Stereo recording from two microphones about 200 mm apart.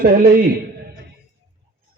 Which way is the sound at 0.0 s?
50° right (ahead or behind).